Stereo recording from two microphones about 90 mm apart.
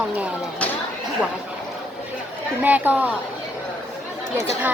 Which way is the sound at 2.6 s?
20° right (ahead or behind).